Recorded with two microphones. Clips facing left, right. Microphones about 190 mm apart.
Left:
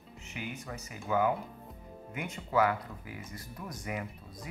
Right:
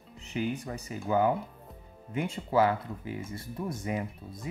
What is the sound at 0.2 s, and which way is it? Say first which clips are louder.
Speech: right 9 dB; 35° right (ahead or behind).